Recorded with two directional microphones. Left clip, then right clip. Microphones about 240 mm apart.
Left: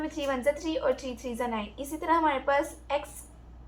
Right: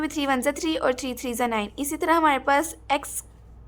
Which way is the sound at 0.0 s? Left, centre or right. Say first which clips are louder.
Right 4 dB; right.